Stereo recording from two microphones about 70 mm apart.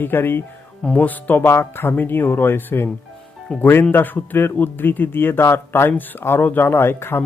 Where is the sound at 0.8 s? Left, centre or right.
Left.